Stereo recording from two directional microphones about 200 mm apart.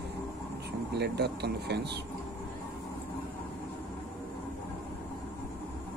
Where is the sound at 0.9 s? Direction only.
55° right (ahead or behind).